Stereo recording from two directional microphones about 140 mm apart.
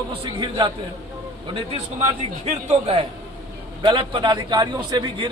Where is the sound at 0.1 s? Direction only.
40° right (ahead or behind).